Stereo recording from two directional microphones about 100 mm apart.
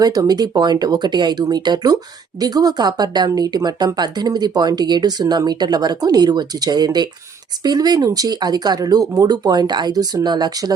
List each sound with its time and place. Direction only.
0.0 s speech: 40° right (ahead or behind)